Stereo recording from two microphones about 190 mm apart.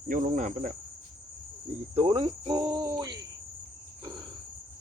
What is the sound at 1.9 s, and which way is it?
Cricket, 30° right (ahead or behind).